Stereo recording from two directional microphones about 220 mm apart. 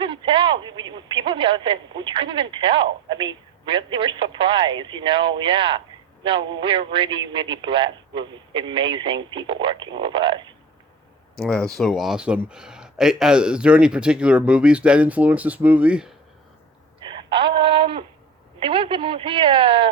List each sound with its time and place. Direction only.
0.0 s speech: 20° right (ahead or behind)
11.3 s speech: 5° left (ahead or behind)
17.0 s a sound: 20° right (ahead or behind)
17.6 s speech: 25° right (ahead or behind)